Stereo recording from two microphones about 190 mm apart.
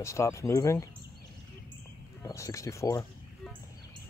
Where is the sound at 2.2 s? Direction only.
15° left (ahead or behind).